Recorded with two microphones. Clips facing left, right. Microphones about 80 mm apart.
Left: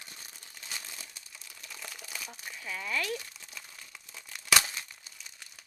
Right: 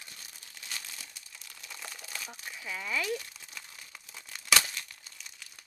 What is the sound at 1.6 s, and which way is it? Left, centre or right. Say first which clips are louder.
Crumpling: even; centre.